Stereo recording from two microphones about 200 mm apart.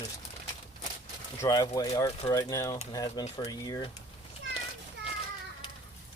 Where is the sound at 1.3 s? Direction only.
20° left (ahead or behind).